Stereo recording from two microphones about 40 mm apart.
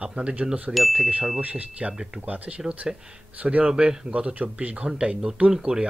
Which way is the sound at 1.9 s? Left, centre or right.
Centre.